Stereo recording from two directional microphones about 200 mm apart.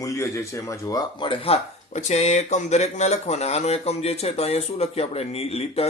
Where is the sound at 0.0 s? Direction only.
15° left (ahead or behind).